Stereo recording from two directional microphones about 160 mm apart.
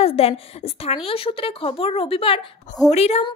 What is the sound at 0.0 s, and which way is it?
A woman's voice, 35° left (ahead or behind).